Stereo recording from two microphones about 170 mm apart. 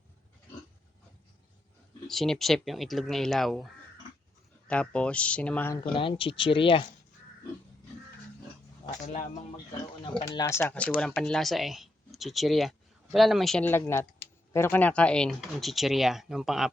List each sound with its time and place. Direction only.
2.0 s speech: centre (ahead or behind)
4.7 s speech: 5° left (ahead or behind)
5.9 s speech: 30° left (ahead or behind)
10.0 s speech: 25° left (ahead or behind); by 16.6 s centre (ahead or behind)